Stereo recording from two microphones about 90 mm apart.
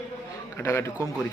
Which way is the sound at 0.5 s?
30° left (ahead or behind).